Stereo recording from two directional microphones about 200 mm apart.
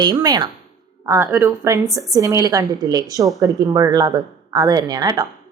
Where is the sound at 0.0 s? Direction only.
20° right (ahead or behind).